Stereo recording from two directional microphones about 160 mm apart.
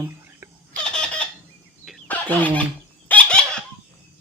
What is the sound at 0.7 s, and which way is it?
Fowl, 5° left (ahead or behind).